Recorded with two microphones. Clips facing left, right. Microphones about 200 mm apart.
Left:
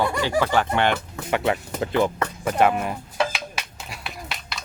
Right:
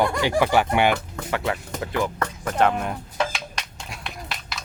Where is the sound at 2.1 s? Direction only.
10° left (ahead or behind).